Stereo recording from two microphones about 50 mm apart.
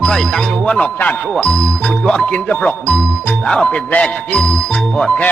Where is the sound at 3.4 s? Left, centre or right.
Centre.